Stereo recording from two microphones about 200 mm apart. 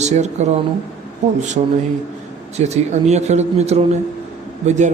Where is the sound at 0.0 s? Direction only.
35° right (ahead or behind).